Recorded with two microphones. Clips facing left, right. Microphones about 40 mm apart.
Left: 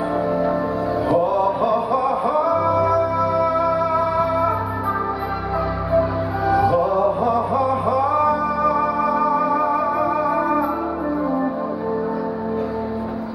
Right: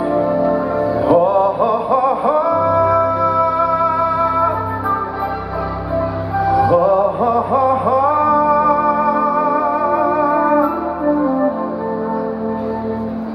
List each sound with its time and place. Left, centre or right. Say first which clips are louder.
1.0 s music: right 6 dB; right
3.3 s music: right 4 dB; centre
6.4 s music: right 3 dB; centre
6.9 s music: right 4 dB; centre
7.5 s a sound: right 5 dB; right
8.1 s music: right 5 dB; right